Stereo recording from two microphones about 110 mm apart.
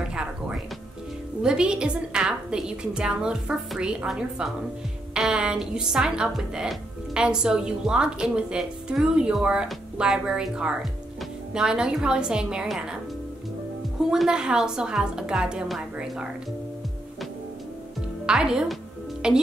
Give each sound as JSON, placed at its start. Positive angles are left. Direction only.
{"t": 0.1, "sound": "music", "side_deg": -5}
{"t": 1.4, "sound": "a woman's voice", "side_deg": -5}
{"t": 14.1, "sound": "a woman's voice", "side_deg": -5}
{"t": 18.2, "sound": "a woman's voice", "side_deg": -5}